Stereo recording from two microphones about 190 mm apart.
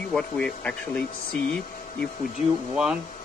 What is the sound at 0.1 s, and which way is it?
Speech, 5° left (ahead or behind).